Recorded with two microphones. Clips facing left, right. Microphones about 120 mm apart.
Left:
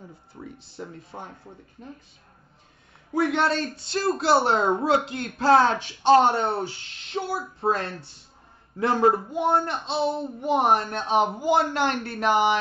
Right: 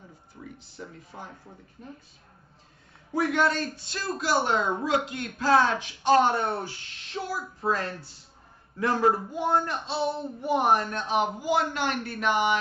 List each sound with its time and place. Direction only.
0.4 s speech: 30° left (ahead or behind)
3.2 s a man's voice: 25° left (ahead or behind)